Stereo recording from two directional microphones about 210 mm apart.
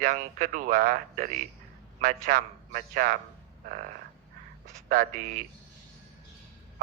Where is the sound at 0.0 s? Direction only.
40° right (ahead or behind).